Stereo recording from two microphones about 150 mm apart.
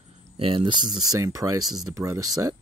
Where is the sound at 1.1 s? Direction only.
25° right (ahead or behind).